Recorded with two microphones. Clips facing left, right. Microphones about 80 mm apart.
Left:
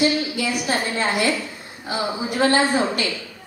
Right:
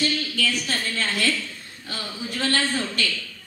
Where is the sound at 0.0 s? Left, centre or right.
Centre.